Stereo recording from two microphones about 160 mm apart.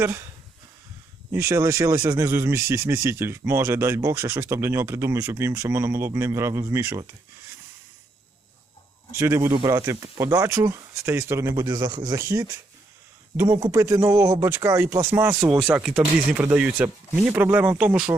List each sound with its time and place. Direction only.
0.0 s speech: 15° right (ahead or behind)
1.3 s speech: 15° right (ahead or behind)
9.1 s speech: 15° right (ahead or behind)